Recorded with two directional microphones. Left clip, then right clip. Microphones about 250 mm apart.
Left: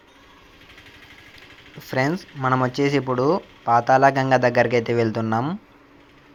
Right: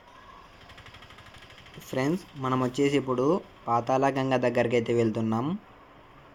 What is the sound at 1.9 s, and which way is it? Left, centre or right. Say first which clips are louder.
Speech: left 6 dB; centre.